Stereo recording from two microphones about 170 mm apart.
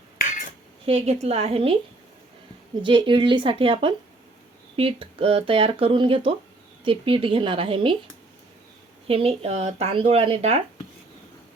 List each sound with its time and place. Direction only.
0.2 s cutlery: 55° left (ahead or behind)
0.9 s speech: 40° right (ahead or behind)
2.8 s speech: 30° right (ahead or behind)
9.0 s speech: 35° right (ahead or behind)